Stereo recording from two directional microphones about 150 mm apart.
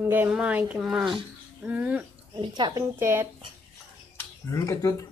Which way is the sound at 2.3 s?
30° right (ahead or behind).